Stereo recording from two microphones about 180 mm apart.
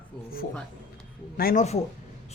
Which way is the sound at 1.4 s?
55° left (ahead or behind).